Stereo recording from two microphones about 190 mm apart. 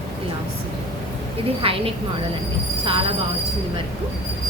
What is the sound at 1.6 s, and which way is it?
Speech, 30° right (ahead or behind).